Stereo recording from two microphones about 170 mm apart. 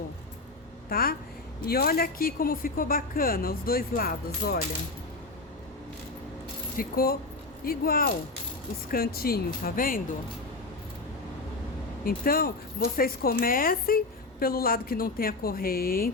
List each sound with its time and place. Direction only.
0.9 s speech: 60° left (ahead or behind)
6.7 s speech: 60° left (ahead or behind)
12.0 s speech: 60° left (ahead or behind)